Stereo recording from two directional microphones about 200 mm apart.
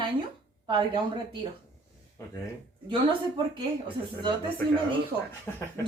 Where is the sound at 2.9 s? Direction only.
25° right (ahead or behind).